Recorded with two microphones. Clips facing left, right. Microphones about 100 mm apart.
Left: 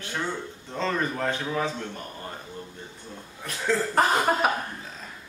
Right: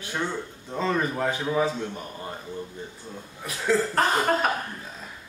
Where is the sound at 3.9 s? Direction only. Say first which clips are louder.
Even; 5° left (ahead or behind).